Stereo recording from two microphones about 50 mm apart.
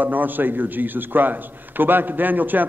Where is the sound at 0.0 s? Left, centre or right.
Right.